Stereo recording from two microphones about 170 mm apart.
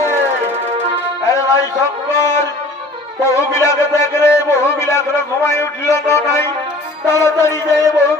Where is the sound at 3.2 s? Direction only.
15° left (ahead or behind).